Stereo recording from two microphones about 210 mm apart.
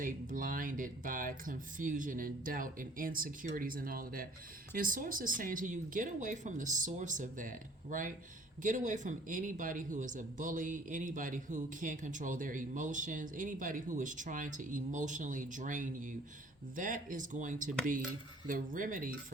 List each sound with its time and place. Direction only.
0.0 s speech: 40° right (ahead or behind)